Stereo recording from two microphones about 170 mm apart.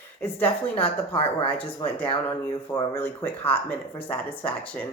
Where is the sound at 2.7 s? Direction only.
15° left (ahead or behind).